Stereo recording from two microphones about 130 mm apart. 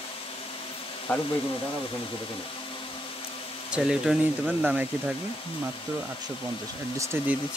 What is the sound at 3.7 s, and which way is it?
Speech, 5° right (ahead or behind).